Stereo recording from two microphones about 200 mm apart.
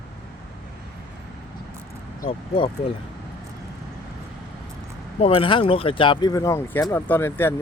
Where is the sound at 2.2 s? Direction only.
25° left (ahead or behind).